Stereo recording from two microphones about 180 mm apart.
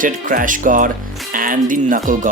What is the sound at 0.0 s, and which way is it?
Speech, 50° right (ahead or behind).